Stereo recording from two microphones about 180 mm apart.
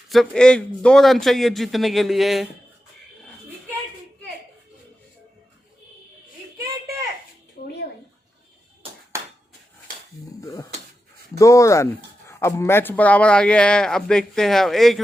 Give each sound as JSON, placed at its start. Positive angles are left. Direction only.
{"t": 0.1, "sound": "a man's voice", "side_deg": 5}
{"t": 10.4, "sound": "speech", "side_deg": 20}